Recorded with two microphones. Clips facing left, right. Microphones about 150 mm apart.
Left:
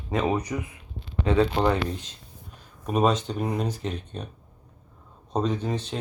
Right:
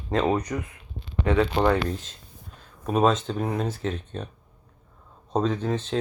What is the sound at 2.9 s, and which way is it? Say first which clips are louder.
Speech: right 1 dB; 10° left (ahead or behind).